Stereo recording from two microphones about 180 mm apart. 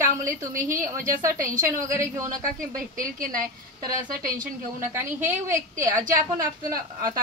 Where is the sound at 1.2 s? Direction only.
15° right (ahead or behind).